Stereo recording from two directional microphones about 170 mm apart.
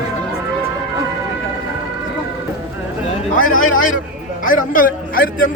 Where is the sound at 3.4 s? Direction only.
55° left (ahead or behind).